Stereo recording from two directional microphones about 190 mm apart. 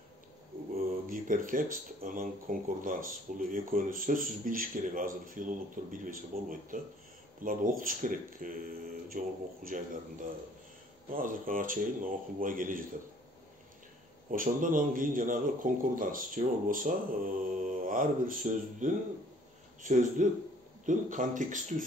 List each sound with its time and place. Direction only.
0.7 s speech: 50° right (ahead or behind)
11.1 s speech: 45° right (ahead or behind)
14.3 s speech: 45° right (ahead or behind)